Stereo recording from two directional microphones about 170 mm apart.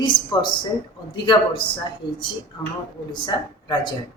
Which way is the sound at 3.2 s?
25° left (ahead or behind).